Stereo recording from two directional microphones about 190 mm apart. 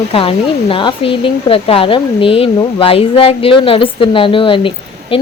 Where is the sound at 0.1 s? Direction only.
30° left (ahead or behind).